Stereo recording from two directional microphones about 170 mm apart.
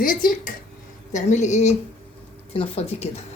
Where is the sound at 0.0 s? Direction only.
55° left (ahead or behind).